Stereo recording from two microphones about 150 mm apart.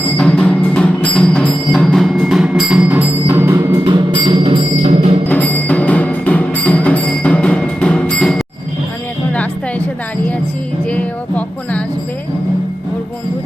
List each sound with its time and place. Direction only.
0.2 s music: 5° left (ahead or behind); by 3.8 s 15° right (ahead or behind)
3.8 s music: 30° right (ahead or behind)
5.3 s music: 10° left (ahead or behind)
10.8 s music: 10° left (ahead or behind)